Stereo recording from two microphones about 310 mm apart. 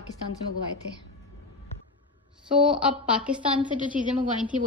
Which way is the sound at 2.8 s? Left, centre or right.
Centre.